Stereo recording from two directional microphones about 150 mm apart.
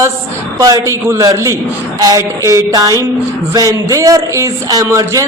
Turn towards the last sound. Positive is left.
turn(degrees=-20)  # may be behind; listen again after turning